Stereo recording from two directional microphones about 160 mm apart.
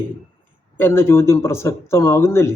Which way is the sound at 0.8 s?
15° left (ahead or behind).